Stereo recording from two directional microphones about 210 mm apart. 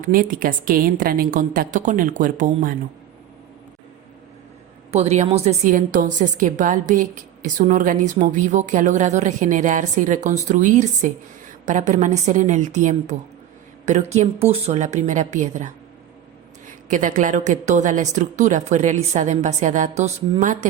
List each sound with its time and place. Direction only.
0.1 s a woman's voice: 40° right (ahead or behind)
4.9 s a woman's voice: 30° right (ahead or behind)